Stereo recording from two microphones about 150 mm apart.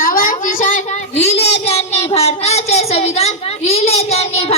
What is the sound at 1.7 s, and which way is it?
Child singing, 45° left (ahead or behind).